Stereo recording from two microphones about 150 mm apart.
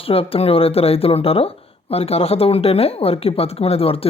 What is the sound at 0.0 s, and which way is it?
Speech, 40° left (ahead or behind).